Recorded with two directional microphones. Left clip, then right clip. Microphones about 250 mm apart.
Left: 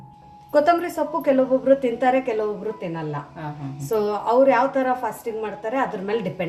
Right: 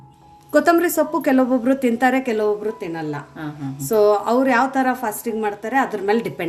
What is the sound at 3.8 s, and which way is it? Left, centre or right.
A woman's voice, right.